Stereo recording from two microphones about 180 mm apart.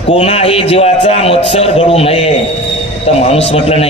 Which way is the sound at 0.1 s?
35° left (ahead or behind).